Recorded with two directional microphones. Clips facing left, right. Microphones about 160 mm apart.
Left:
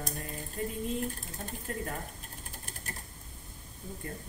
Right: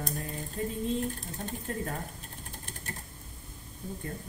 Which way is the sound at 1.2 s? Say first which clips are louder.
Right 3 dB; 35° right (ahead or behind).